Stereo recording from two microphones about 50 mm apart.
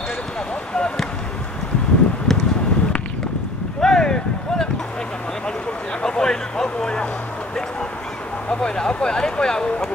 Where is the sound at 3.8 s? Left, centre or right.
Centre.